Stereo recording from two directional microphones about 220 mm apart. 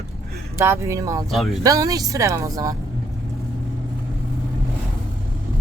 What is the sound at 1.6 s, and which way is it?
Speech, 15° right (ahead or behind).